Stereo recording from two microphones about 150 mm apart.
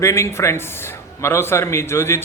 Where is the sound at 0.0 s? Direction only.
20° left (ahead or behind).